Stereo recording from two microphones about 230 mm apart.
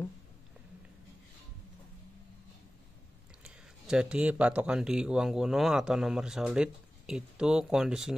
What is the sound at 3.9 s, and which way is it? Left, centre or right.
Speech, centre.